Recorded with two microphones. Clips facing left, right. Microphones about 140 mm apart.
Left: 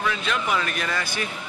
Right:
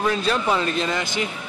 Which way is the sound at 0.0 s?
35° right (ahead or behind).